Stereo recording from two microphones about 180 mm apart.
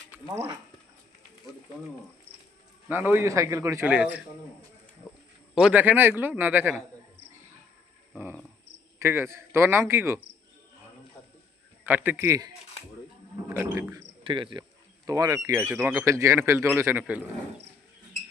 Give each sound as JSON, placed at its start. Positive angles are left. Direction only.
{"t": 2.9, "sound": "a man's voice", "side_deg": -10}
{"t": 5.0, "sound": "a sound", "side_deg": -5}
{"t": 5.5, "sound": "a man's voice", "side_deg": -5}
{"t": 8.1, "sound": "insect", "side_deg": -10}
{"t": 9.0, "sound": "a man's voice", "side_deg": -15}
{"t": 11.9, "sound": "a man's voice", "side_deg": -10}